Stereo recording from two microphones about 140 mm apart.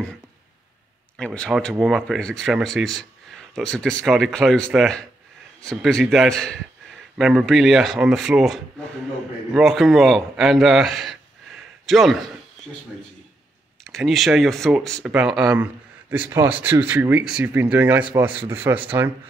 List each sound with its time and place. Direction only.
1.1 s a man's voice: 5° left (ahead or behind)
13.8 s speech: centre (ahead or behind); by 18.9 s 15° right (ahead or behind)